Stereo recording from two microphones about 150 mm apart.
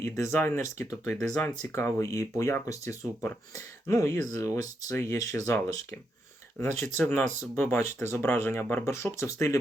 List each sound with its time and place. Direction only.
0.0 s speech: 20° left (ahead or behind)
6.8 s speech: 15° left (ahead or behind)